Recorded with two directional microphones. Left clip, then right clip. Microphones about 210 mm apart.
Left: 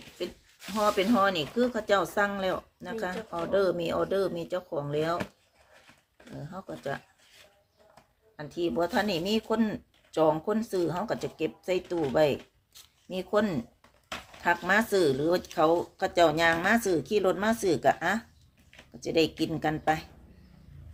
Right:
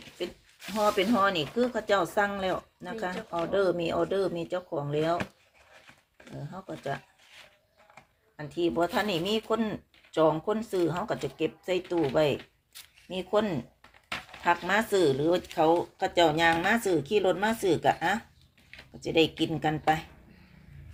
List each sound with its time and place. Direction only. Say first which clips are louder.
0.7 s speech: even; 5° right (ahead or behind)
6.5 s speech: even; 5° right (ahead or behind)
8.4 s speech: right 1 dB; centre (ahead or behind)